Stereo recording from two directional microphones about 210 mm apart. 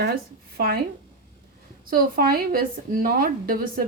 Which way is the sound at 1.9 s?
45° right (ahead or behind).